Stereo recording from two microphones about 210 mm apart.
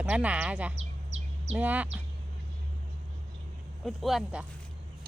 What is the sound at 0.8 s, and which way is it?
Bird, 30° right (ahead or behind).